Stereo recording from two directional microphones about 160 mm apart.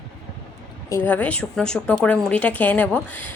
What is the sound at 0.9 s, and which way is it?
A woman's voice, 15° left (ahead or behind).